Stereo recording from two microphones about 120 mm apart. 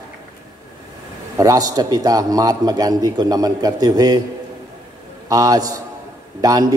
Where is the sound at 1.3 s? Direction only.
30° right (ahead or behind).